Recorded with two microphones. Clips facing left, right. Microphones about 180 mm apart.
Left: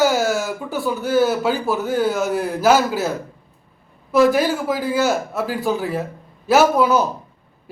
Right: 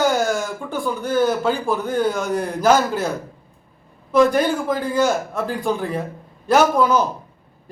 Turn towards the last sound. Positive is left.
turn(degrees=10)  # may be behind; listen again after turning